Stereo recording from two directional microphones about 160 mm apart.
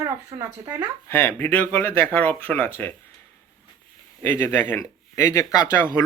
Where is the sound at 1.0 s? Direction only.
15° left (ahead or behind).